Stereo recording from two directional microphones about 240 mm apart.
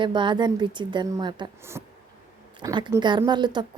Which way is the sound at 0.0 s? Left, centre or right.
Centre.